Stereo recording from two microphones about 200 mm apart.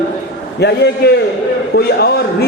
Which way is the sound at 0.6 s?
55° left (ahead or behind).